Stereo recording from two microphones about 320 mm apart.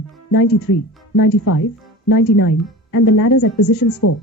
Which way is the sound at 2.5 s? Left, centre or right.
Left.